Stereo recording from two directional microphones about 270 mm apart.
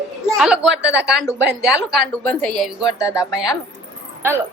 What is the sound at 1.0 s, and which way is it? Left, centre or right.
Speech, centre.